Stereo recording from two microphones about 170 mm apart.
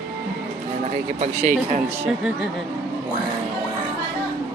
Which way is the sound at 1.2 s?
45° right (ahead or behind).